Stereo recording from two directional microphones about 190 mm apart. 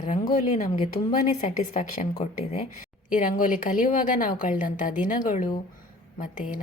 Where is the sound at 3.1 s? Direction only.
45° left (ahead or behind).